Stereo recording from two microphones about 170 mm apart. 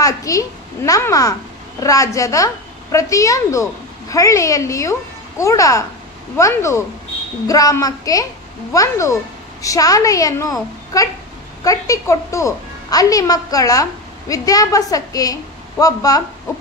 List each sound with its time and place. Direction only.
0.0 s a woman's voice: 20° left (ahead or behind)